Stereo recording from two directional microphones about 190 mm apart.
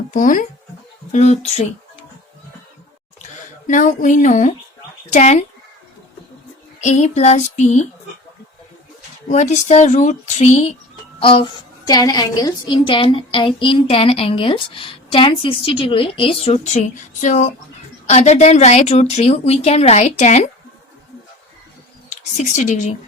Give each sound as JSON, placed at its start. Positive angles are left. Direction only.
{"t": 0.1, "sound": "speech", "side_deg": 45}
{"t": 3.7, "sound": "speech", "side_deg": 40}
{"t": 6.8, "sound": "speech", "side_deg": 35}
{"t": 9.3, "sound": "a woman's voice", "side_deg": 35}
{"t": 22.1, "sound": "speech", "side_deg": 40}